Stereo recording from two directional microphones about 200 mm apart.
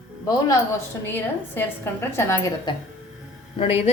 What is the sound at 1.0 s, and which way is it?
A woman's voice, 10° left (ahead or behind).